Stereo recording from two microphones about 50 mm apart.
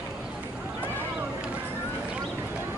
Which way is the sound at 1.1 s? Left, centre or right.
Centre.